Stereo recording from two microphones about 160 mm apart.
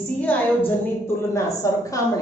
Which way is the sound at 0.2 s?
10° left (ahead or behind).